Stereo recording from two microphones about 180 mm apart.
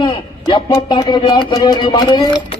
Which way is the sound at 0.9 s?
25° left (ahead or behind).